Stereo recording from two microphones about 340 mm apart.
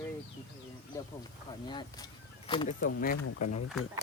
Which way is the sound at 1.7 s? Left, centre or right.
Centre.